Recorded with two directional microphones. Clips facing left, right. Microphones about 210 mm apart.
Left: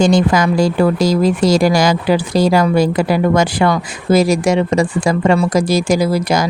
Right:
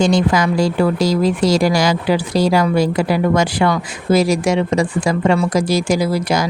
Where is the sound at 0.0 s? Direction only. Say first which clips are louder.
Left 2 dB; 45° left (ahead or behind).